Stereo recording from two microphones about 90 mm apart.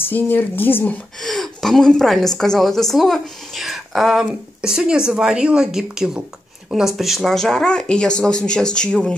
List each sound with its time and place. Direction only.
0.0 s a woman's voice: 20° left (ahead or behind)
1.2 s a woman's voice: 5° left (ahead or behind)